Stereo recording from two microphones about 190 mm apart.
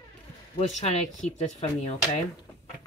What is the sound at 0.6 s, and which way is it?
Speech, 35° left (ahead or behind).